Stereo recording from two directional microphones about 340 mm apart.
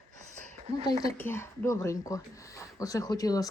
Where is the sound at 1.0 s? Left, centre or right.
Centre.